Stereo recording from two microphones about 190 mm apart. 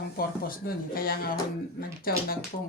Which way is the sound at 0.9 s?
50° left (ahead or behind).